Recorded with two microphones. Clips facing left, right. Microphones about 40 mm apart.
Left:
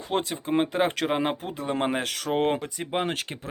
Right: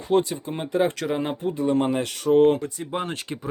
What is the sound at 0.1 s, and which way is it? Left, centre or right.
Speech, left.